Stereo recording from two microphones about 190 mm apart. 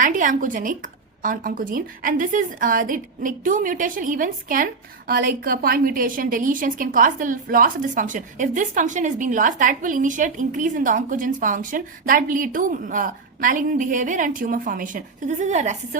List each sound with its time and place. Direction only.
0.0 s a woman's voice: 45° right (ahead or behind)